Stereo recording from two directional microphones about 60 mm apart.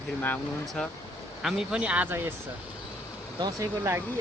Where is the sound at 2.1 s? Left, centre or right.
Right.